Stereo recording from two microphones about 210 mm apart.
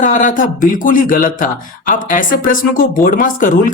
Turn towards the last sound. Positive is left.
turn(degrees=40)  # may be behind; listen again after turning